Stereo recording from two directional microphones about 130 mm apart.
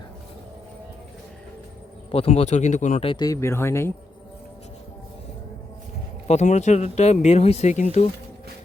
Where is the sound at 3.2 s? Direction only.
20° left (ahead or behind).